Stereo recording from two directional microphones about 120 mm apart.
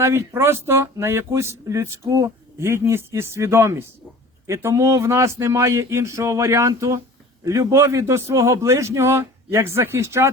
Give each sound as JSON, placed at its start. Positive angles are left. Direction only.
{"t": 0.0, "sound": "speech", "side_deg": -25}